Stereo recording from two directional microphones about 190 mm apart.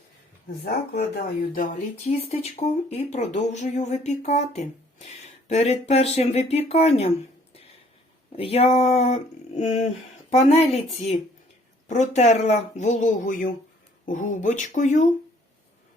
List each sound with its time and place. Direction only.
1.1 s speech: 45° left (ahead or behind)
2.3 s speech: 35° left (ahead or behind)
8.4 s speech: 30° left (ahead or behind)